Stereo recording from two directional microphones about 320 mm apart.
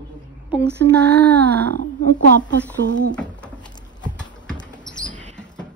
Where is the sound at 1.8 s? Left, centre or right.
Left.